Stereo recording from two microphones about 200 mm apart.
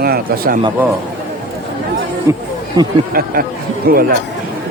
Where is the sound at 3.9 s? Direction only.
50° right (ahead or behind).